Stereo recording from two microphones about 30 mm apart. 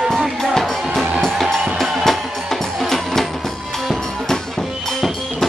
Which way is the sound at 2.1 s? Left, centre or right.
Centre.